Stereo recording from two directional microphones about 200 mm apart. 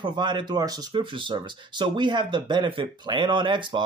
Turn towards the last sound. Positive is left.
turn(degrees=-25)  # may be behind; listen again after turning